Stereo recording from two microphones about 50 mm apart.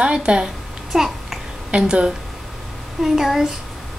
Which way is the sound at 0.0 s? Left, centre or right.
Centre.